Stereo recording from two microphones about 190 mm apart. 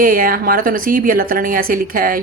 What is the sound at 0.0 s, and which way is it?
A woman's voice, 50° right (ahead or behind).